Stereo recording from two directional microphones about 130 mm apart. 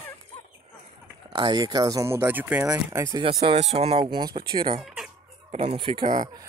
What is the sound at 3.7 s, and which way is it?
Speech, 50° right (ahead or behind).